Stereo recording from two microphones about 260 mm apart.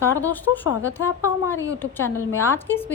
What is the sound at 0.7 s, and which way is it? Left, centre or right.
Speech, centre.